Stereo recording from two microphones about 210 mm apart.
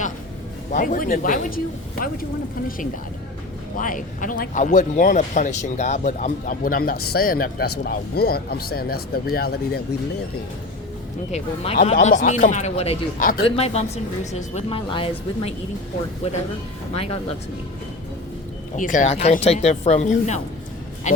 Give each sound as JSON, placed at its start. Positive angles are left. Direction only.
{"t": 0.7, "sound": "speech", "side_deg": 40}
{"t": 3.8, "sound": "speech", "side_deg": 40}
{"t": 11.3, "sound": "speech", "side_deg": 30}
{"t": 16.9, "sound": "speech", "side_deg": 30}
{"t": 18.8, "sound": "speech", "side_deg": 40}